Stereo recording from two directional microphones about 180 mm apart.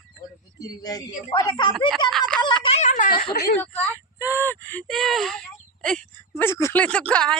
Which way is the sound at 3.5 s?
10° left (ahead or behind).